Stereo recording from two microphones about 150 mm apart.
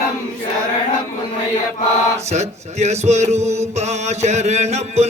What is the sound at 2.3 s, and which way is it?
Music, 50° right (ahead or behind).